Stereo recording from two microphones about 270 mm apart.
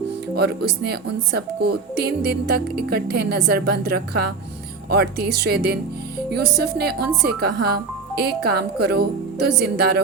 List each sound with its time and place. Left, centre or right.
0.3 s speech: right